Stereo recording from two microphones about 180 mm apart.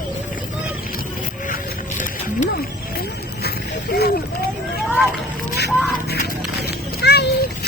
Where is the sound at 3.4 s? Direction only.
60° left (ahead or behind).